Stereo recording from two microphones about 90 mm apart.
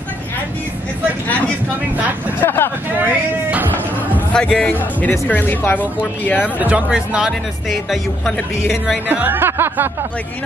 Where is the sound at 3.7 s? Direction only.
15° left (ahead or behind).